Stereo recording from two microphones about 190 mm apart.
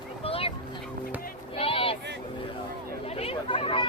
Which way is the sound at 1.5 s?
30° left (ahead or behind).